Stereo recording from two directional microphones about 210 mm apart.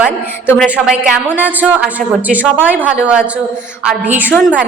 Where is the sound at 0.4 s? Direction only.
10° left (ahead or behind).